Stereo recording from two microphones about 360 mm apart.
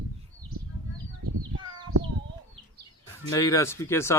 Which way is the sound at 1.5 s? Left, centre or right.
Right.